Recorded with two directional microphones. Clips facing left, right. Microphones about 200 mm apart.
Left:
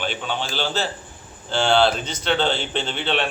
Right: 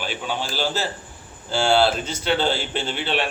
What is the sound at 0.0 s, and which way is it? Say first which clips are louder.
A man's voice: left 1 dB; 5° right (ahead or behind).